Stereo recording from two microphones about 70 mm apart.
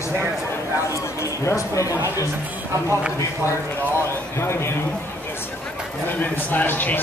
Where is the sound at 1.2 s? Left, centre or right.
Left.